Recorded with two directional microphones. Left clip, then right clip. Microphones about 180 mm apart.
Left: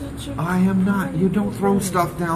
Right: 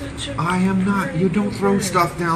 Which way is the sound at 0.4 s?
5° left (ahead or behind).